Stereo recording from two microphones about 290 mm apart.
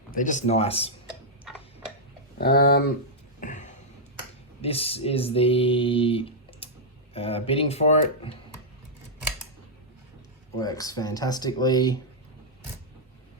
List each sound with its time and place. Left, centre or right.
0.1 s speech: left
1.5 s tick-tock: centre
2.4 s speech: left
3.4 s a sound: left
4.6 s speech: centre
10.6 s speech: centre